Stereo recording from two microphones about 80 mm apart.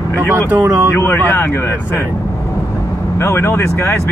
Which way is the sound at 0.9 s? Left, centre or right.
Left.